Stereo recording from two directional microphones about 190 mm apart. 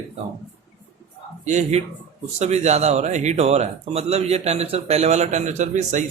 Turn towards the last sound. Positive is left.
turn(degrees=-40)  # may be behind; listen again after turning